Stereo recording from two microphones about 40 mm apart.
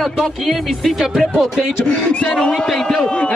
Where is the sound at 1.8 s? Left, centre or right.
Left.